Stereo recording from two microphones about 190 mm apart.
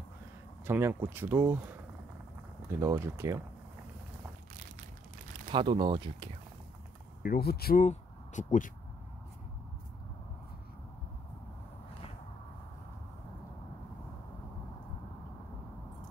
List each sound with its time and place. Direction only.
0.7 s speech: 10° right (ahead or behind)
2.8 s speech: 15° right (ahead or behind)
5.5 s speech: 25° right (ahead or behind)
7.2 s speech: 55° left (ahead or behind)
7.8 s speech: 40° left (ahead or behind)